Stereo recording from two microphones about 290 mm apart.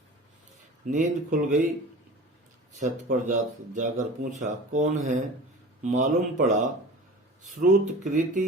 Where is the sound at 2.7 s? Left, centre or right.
Right.